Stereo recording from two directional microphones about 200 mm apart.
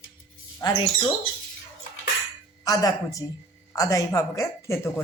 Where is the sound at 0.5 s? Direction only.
20° left (ahead or behind).